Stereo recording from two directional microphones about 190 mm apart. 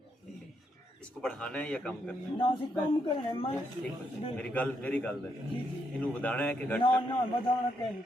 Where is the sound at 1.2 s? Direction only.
5° left (ahead or behind).